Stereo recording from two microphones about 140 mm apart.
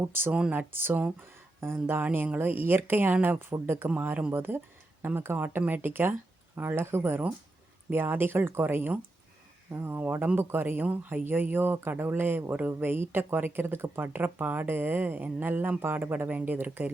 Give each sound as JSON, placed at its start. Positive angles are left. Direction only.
{"t": 0.0, "sound": "speech", "side_deg": -15}